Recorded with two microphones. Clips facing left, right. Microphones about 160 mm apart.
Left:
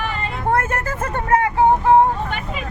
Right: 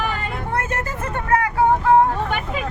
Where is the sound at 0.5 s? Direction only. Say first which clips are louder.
Left 3 dB; 50° left (ahead or behind).